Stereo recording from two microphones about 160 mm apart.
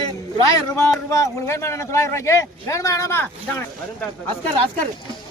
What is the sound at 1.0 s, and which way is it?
Speech, 20° left (ahead or behind).